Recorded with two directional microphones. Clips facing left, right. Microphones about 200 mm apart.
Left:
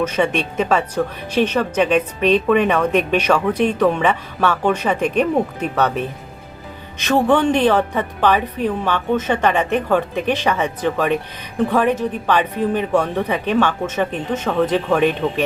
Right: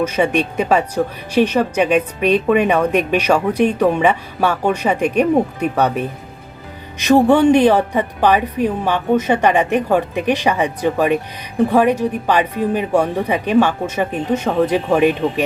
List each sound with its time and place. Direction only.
0.0 s a woman's voice: 10° right (ahead or behind)